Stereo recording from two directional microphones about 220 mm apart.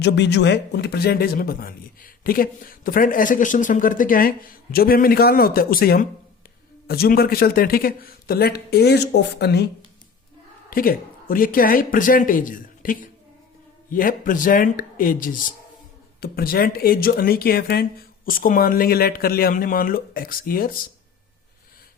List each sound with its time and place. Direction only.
0.0 s speech: 50° left (ahead or behind)
10.7 s speech: 40° left (ahead or behind)